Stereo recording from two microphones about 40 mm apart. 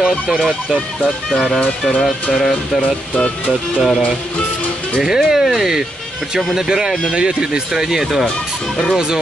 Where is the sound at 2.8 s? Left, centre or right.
Left.